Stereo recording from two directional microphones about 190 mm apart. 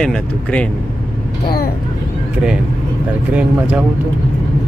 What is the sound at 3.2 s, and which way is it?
Speech, 5° right (ahead or behind).